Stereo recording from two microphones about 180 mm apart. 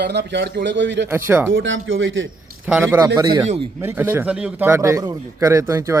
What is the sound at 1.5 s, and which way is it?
Speech, 90° right.